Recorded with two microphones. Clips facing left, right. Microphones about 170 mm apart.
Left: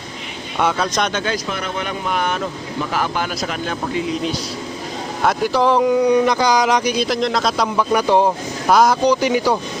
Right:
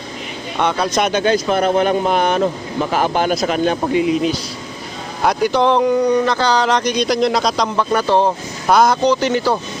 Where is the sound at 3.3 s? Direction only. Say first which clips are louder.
Right 8 dB; 25° right (ahead or behind).